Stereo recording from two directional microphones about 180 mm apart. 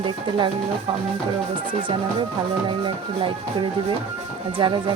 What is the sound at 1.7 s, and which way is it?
A woman's voice, 25° right (ahead or behind).